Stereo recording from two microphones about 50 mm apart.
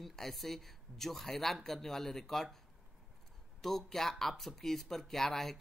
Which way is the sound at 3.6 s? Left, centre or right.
Centre.